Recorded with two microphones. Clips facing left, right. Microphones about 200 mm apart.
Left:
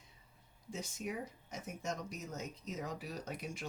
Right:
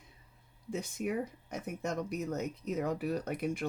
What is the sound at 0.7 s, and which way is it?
Speech, 60° right (ahead or behind).